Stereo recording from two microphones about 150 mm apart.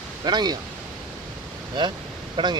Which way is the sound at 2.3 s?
30° right (ahead or behind).